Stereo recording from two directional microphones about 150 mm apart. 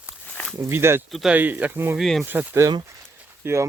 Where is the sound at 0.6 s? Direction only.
15° right (ahead or behind).